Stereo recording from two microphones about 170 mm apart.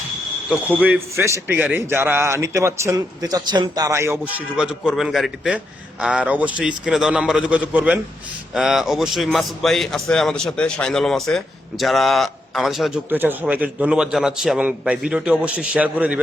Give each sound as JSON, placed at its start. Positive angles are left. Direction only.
{"t": 0.6, "sound": "a man's voice", "side_deg": -10}
{"t": 4.4, "sound": "a man's voice", "side_deg": -5}